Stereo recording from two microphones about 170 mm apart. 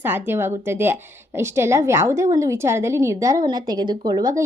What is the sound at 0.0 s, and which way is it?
A woman's voice, 10° right (ahead or behind).